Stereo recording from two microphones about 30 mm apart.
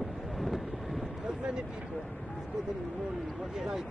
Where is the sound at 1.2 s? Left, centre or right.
Right.